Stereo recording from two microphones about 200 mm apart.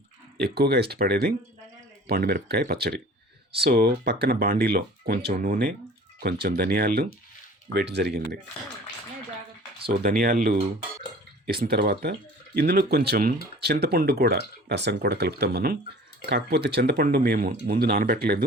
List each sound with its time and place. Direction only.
0.4 s speech: 55° right (ahead or behind)
9.9 s speech: 45° right (ahead or behind)